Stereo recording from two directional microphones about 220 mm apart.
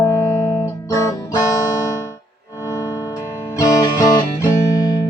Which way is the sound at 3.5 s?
15° left (ahead or behind).